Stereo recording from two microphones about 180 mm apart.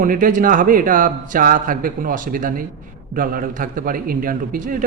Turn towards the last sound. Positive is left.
turn(degrees=-50)  # may be behind; listen again after turning